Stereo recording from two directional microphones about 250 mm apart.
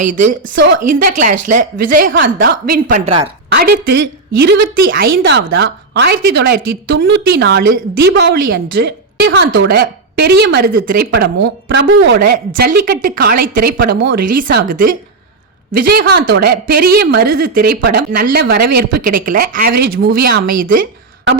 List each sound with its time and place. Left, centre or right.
0.5 s speech: right
1.0 s a woman's voice: right
3.0 s a woman's voice: right
3.5 s a woman's voice: right